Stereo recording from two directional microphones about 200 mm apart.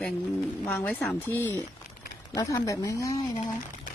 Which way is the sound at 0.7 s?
10° left (ahead or behind).